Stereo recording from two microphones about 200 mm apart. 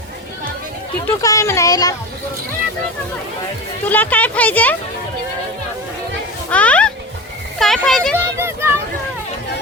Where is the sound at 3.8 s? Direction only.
10° left (ahead or behind).